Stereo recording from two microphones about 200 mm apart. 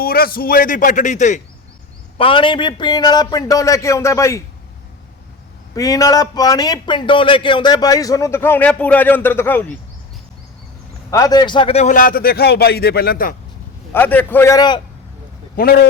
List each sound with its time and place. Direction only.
0.0 s a man's voice: 50° left (ahead or behind)
2.1 s a man's voice: 25° left (ahead or behind)
5.7 s a man's voice: 15° left (ahead or behind)
11.1 s a man's voice: 20° left (ahead or behind); by 13.3 s 45° left (ahead or behind)
13.9 s a man's voice: 10° left (ahead or behind)
15.5 s a man's voice: 50° left (ahead or behind)